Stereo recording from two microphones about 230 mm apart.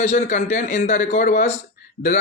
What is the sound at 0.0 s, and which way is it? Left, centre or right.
A man's voice, left.